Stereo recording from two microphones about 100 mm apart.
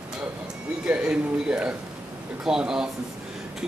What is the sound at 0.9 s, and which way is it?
A man's voice, 10° right (ahead or behind).